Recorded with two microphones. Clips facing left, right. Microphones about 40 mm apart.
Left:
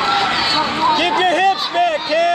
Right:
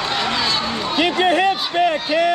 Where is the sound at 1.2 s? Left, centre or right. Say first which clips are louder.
Left 2 dB; centre.